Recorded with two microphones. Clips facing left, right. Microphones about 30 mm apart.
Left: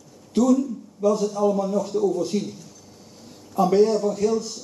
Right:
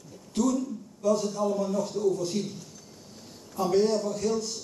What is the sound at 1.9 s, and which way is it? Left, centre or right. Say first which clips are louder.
Speech: left 5 dB; left.